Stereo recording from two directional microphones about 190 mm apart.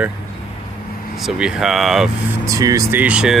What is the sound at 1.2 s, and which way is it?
Speech, 5° right (ahead or behind).